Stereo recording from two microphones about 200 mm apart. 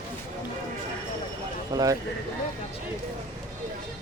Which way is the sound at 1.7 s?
20° right (ahead or behind).